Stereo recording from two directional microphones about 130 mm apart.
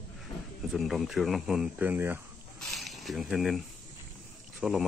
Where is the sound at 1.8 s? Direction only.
15° right (ahead or behind).